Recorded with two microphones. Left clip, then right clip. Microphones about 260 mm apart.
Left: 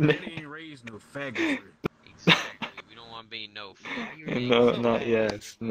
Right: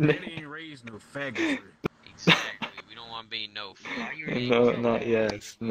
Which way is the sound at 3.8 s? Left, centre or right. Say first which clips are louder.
Right 1 dB; centre.